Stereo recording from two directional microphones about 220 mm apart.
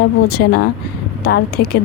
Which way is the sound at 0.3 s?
45° left (ahead or behind).